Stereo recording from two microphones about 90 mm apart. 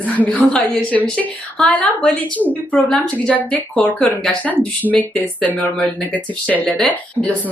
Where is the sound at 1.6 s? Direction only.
5° left (ahead or behind).